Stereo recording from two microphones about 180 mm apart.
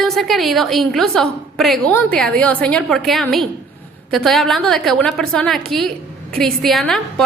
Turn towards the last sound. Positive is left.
turn(degrees=0)  # may be behind; listen again after turning